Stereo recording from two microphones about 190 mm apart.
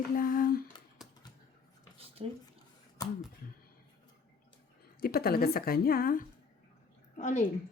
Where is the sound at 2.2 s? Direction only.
30° right (ahead or behind).